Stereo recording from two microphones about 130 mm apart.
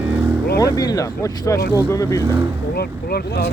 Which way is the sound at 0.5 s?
25° left (ahead or behind).